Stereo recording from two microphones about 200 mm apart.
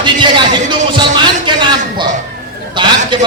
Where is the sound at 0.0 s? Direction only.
25° right (ahead or behind).